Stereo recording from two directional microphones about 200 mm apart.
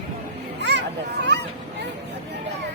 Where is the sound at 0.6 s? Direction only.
60° right (ahead or behind).